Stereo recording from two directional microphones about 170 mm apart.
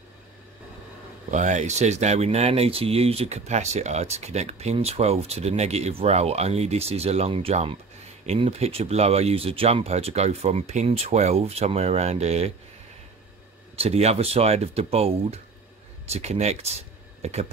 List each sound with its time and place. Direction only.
1.3 s speech: 45° right (ahead or behind)
13.7 s speech: 40° right (ahead or behind)